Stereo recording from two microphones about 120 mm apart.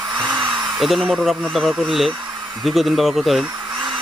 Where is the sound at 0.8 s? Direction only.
5° right (ahead or behind).